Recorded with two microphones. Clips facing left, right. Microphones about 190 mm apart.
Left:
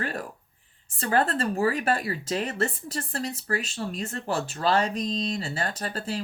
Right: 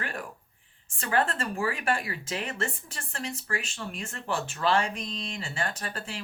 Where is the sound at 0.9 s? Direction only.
35° left (ahead or behind).